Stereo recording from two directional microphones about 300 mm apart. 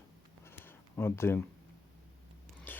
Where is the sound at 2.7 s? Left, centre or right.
Centre.